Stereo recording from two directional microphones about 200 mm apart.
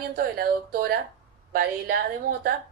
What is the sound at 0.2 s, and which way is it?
Speech, 50° right (ahead or behind).